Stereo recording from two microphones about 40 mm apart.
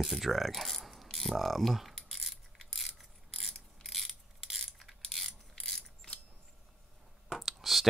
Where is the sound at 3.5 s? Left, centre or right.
Centre.